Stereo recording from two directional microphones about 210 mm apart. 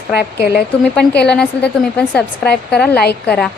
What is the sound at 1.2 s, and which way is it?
A woman's voice, 5° left (ahead or behind).